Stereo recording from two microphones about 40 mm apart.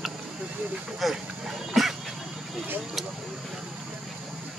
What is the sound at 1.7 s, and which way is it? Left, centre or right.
Dog, centre.